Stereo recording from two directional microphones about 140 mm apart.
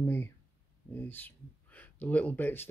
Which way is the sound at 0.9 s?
15° left (ahead or behind).